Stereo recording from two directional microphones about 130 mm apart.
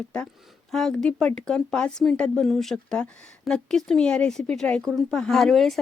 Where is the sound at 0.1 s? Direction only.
5° left (ahead or behind).